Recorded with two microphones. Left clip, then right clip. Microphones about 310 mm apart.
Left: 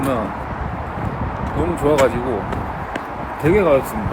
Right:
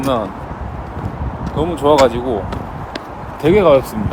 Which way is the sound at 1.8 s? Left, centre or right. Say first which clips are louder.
Right 5 dB; centre.